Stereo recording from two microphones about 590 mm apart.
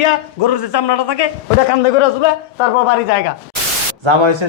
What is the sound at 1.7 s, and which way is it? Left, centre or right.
Speech, left.